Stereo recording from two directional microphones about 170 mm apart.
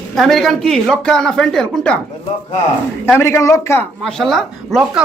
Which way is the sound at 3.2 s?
15° left (ahead or behind).